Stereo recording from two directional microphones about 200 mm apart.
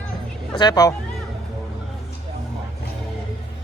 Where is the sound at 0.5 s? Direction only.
20° left (ahead or behind).